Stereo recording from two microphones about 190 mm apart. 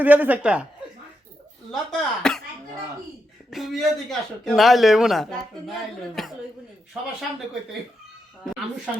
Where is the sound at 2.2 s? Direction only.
5° left (ahead or behind).